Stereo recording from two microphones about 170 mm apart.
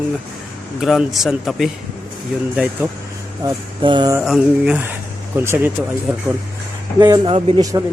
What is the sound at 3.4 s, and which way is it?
Speech, 25° right (ahead or behind).